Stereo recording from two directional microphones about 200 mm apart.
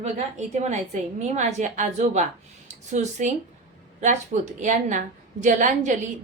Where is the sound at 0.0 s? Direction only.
35° right (ahead or behind).